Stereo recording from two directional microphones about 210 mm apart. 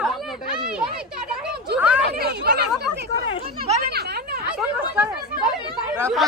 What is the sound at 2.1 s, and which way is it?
Speech, 50° right (ahead or behind).